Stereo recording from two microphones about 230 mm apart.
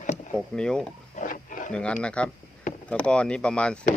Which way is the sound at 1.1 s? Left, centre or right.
Left.